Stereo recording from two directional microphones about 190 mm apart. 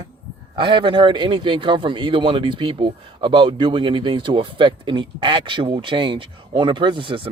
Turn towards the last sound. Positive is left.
turn(degrees=-25)  # may be behind; listen again after turning